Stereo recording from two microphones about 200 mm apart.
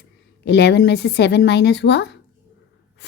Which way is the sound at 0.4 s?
55° left (ahead or behind).